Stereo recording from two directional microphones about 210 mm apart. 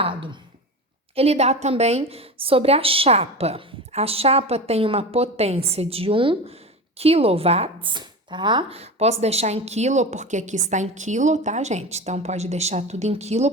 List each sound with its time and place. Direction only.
0.0 s a woman's voice: 25° right (ahead or behind)